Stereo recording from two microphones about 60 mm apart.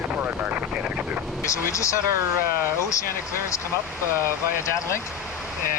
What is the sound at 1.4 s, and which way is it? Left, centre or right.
Speech, left.